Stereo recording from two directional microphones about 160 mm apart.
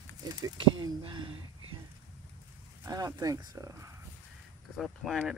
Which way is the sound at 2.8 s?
20° right (ahead or behind).